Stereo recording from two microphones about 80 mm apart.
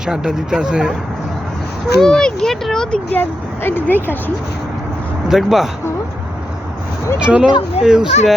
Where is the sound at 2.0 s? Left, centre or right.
Centre.